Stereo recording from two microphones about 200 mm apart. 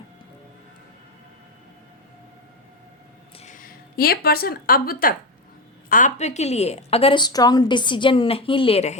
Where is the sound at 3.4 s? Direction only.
40° left (ahead or behind).